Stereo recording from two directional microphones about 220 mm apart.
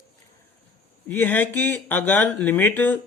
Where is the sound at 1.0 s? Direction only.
10° left (ahead or behind).